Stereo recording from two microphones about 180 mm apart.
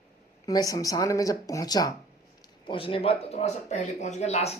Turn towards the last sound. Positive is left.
turn(degrees=35)  # may be behind; listen again after turning